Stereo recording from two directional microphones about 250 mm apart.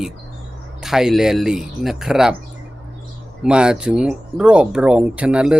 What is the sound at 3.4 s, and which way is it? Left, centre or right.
Speech, centre.